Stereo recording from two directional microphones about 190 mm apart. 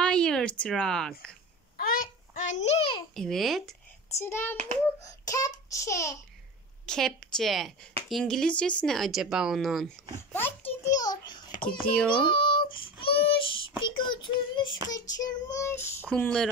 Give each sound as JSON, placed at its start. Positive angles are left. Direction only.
{"t": 0.0, "sound": "a sound", "side_deg": 5}
{"t": 1.8, "sound": "a sound", "side_deg": 50}
{"t": 3.2, "sound": "speech", "side_deg": 0}
{"t": 4.1, "sound": "a child's voice", "side_deg": 15}
{"t": 6.9, "sound": "speech", "side_deg": 5}
{"t": 10.3, "sound": "a child's voice", "side_deg": 10}
{"t": 12.1, "sound": "child singing", "side_deg": 25}
{"t": 15.4, "sound": "a child's voice", "side_deg": 15}